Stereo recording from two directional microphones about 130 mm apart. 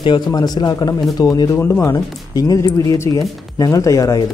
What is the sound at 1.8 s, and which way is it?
A man's voice, 30° left (ahead or behind).